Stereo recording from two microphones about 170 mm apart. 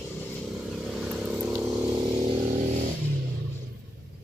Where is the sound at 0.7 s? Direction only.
5° right (ahead or behind).